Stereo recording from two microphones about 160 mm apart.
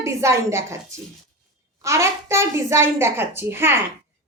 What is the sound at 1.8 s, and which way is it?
A child's voice, 15° right (ahead or behind).